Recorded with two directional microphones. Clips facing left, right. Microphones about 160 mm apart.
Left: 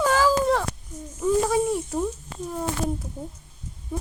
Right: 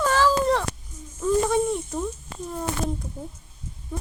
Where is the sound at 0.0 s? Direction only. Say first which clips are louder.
Left 1 dB; 10° left (ahead or behind).